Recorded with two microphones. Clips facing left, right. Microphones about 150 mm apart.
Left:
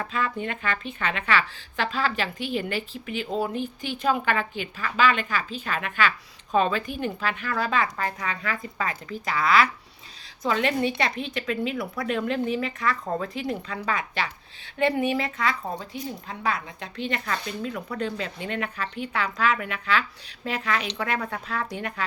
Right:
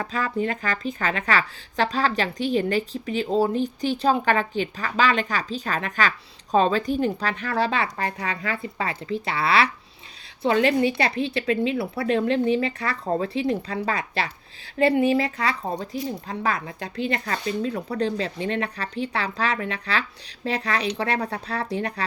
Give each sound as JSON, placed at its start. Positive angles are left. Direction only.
{"t": 0.0, "sound": "a woman's voice", "side_deg": -40}